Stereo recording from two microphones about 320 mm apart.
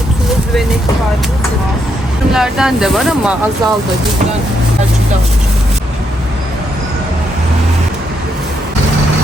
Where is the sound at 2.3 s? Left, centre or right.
Centre.